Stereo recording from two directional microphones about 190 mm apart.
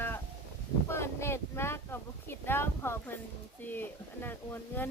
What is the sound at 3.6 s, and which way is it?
Speech, 10° left (ahead or behind).